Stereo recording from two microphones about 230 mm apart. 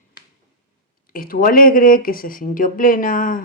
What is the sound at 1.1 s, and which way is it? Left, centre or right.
Speech, left.